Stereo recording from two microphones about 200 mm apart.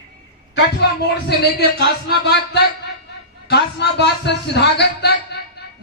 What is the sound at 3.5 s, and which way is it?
A man's voice, 55° left (ahead or behind).